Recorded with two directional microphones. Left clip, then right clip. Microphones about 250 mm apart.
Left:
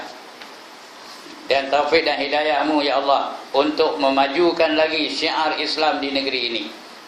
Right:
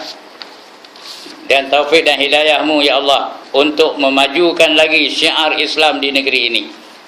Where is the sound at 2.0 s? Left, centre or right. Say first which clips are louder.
Right 9 dB; centre.